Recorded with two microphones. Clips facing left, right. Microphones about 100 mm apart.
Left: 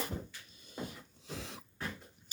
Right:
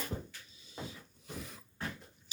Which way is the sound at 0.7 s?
50° left (ahead or behind).